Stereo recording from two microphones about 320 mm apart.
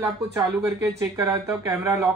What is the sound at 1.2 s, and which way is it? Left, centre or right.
Speech, centre.